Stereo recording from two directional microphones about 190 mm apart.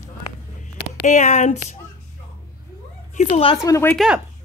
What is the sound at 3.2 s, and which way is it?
Speech, 35° left (ahead or behind).